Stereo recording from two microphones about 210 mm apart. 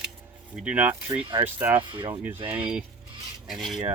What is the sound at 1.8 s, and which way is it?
Speech, 20° right (ahead or behind).